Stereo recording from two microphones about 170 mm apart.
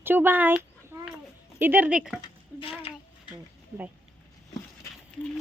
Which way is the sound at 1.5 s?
10° right (ahead or behind).